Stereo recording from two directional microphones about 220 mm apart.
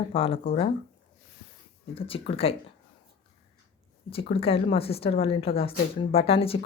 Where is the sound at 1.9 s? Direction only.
25° left (ahead or behind).